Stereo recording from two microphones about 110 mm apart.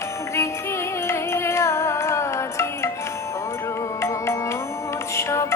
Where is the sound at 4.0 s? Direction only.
25° left (ahead or behind).